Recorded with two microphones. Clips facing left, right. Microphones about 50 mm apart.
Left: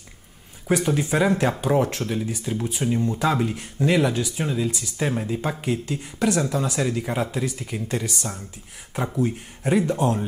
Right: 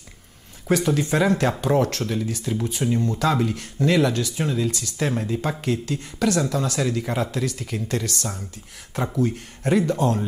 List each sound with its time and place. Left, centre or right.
0.7 s speech: centre